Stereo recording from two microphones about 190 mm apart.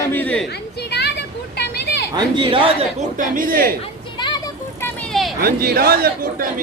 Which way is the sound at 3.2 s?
45° right (ahead or behind).